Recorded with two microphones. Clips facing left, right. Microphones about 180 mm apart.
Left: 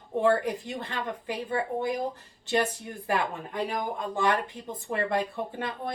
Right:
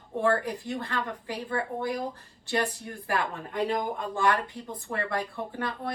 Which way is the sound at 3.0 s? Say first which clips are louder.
Left 2 dB; 20° left (ahead or behind).